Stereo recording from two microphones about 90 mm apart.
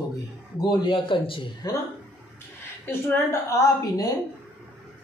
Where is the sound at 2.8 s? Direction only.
30° left (ahead or behind).